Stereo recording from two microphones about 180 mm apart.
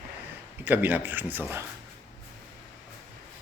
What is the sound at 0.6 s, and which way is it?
Speech, 10° right (ahead or behind).